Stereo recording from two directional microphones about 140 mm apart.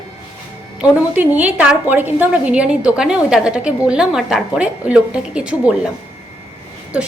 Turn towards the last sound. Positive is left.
turn(degrees=-10)  # may be behind; listen again after turning